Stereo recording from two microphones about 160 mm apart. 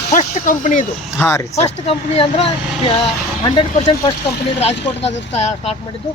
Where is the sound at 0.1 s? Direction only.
50° left (ahead or behind).